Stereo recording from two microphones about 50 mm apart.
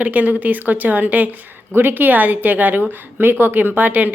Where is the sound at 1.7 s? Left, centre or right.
Right.